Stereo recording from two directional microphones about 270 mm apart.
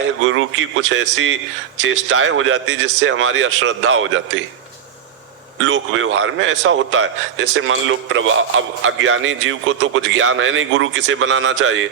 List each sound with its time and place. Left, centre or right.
0.0 s a man's voice: right
5.5 s a man's voice: right